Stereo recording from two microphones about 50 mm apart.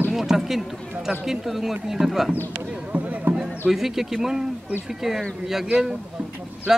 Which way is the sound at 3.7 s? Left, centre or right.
Centre.